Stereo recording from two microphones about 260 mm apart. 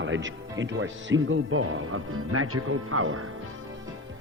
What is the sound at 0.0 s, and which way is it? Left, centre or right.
Speech, right.